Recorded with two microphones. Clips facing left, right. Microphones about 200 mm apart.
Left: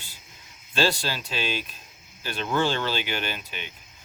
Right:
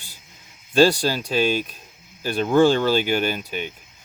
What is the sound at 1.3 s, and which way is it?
Speech, 45° right (ahead or behind).